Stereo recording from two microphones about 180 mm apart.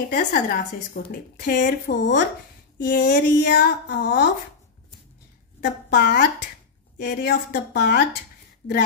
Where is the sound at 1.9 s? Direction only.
70° left (ahead or behind).